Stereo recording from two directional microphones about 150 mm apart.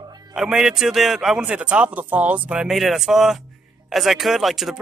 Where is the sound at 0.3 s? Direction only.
5° right (ahead or behind).